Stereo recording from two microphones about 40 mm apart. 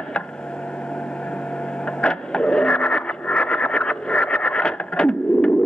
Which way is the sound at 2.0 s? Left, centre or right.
Left.